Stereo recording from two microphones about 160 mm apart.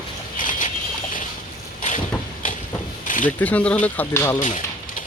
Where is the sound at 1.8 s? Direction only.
50° left (ahead or behind).